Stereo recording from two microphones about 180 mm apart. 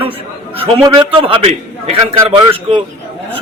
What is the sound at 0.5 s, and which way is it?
A man's voice, 30° right (ahead or behind).